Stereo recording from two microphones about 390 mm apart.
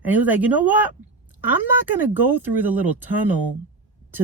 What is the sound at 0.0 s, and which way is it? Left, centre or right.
Speech, centre.